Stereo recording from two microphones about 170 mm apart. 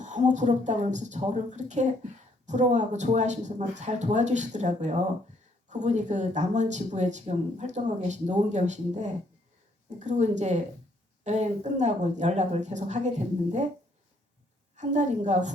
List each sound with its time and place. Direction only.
0.0 s speech: 45° right (ahead or behind)
14.8 s speech: 45° right (ahead or behind)